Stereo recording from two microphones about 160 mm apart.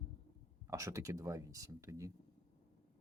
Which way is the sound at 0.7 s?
20° right (ahead or behind).